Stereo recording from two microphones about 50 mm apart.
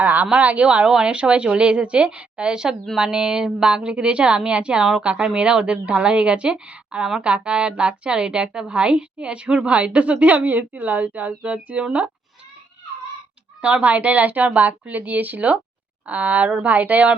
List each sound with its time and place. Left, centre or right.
0.0 s a woman's voice: right
0.9 s a woman's voice: centre
13.6 s speech: right